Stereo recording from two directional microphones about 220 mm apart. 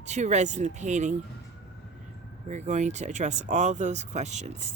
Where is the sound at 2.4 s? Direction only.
35° right (ahead or behind).